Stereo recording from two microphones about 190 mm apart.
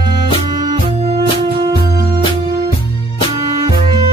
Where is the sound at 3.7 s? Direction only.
25° right (ahead or behind).